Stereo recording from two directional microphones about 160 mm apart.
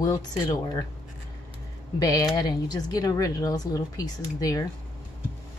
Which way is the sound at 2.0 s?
20° left (ahead or behind).